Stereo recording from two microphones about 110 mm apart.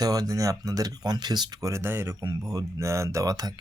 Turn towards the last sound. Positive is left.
turn(degrees=-35)  # may be behind; listen again after turning